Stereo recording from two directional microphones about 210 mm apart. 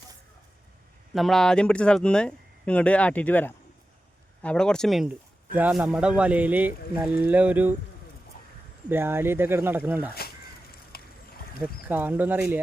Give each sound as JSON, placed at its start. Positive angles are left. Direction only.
{"t": 1.1, "sound": "speech", "side_deg": 0}
{"t": 8.9, "sound": "speech", "side_deg": -10}
{"t": 10.2, "sound": "a sound", "side_deg": 45}
{"t": 11.6, "sound": "speech", "side_deg": -10}